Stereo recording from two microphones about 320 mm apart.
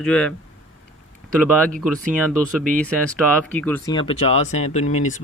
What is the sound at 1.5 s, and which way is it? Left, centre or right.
Speech, centre.